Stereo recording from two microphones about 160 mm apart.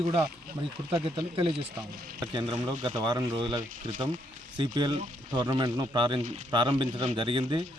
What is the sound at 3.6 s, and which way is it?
Speech, 55° right (ahead or behind).